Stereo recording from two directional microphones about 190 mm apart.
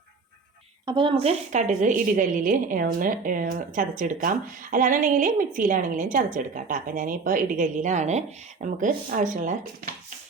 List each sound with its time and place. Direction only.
0.9 s a woman's voice: 25° right (ahead or behind); by 9.9 s 40° right (ahead or behind)